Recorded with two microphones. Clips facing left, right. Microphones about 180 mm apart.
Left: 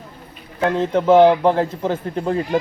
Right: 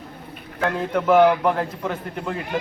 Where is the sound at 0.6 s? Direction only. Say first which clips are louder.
Left 5 dB; 25° left (ahead or behind).